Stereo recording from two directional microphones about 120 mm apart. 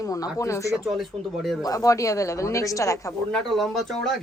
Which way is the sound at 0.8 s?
Centre (ahead or behind).